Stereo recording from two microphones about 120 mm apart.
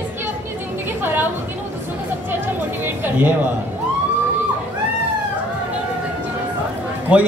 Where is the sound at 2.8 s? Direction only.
15° right (ahead or behind).